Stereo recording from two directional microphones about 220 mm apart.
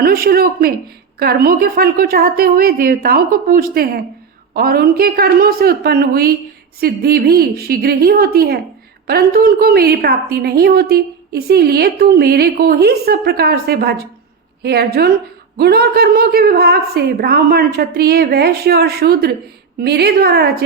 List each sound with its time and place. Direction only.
0.0 s a woman's voice: 45° right (ahead or behind)